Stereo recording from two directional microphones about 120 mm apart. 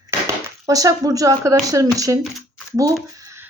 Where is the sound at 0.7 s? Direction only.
30° right (ahead or behind).